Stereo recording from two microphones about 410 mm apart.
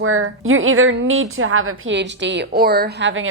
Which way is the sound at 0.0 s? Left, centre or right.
Right.